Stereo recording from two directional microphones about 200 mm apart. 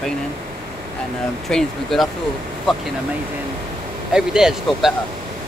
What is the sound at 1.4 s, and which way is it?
Speech, centre (ahead or behind).